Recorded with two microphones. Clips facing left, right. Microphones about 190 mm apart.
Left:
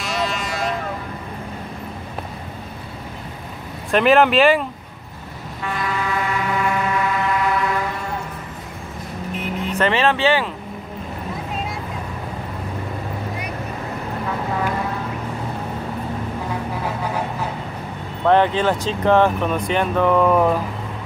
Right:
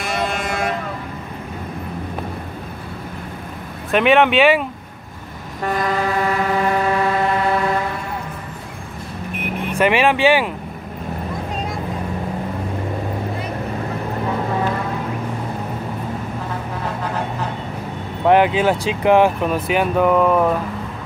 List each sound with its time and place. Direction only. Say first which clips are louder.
0.0 s vehicle: right 2 dB; 55° right (ahead or behind)
3.9 s speech: even; centre (ahead or behind)
5.6 s vehicle: right 5 dB; 40° right (ahead or behind)
9.3 s vehicle: even; 60° right (ahead or behind)
9.7 s speech: right 3 dB; 10° right (ahead or behind)
16.8 s a sound: even; 10° left (ahead or behind)
18.2 s speech: right 2 dB; 10° right (ahead or behind)